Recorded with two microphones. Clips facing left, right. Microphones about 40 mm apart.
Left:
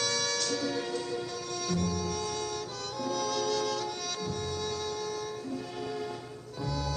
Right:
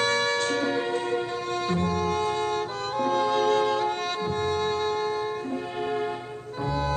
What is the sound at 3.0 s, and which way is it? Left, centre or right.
Music, right.